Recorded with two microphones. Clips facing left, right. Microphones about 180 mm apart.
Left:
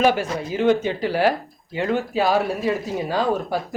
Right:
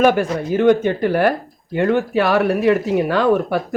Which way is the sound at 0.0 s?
55° right (ahead or behind).